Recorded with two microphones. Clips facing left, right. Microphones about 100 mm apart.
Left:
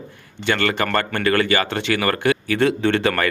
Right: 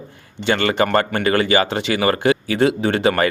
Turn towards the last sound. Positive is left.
turn(degrees=-15)  # may be behind; listen again after turning